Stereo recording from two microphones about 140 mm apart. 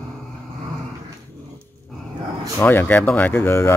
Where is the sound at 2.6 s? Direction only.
15° left (ahead or behind).